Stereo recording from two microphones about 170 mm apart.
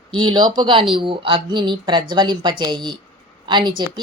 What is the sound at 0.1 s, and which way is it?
Speech, 25° right (ahead or behind).